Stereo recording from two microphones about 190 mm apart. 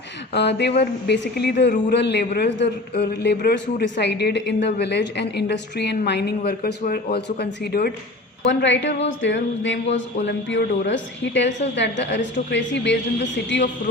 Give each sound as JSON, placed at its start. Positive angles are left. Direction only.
{"t": 0.3, "sound": "a man's voice", "side_deg": 65}
{"t": 8.4, "sound": "a woman's voice", "side_deg": 70}